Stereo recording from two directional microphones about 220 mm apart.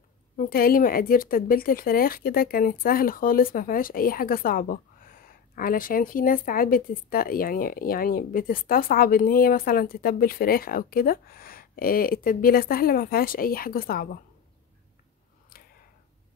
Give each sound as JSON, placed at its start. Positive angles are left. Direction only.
{"t": 0.4, "sound": "speech", "side_deg": 40}